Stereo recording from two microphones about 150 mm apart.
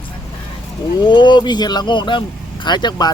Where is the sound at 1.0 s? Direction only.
30° left (ahead or behind).